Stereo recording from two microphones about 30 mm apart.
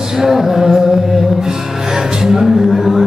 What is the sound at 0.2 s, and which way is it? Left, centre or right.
Music, centre.